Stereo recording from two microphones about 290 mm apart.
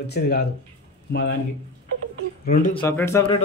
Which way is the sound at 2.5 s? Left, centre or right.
Left.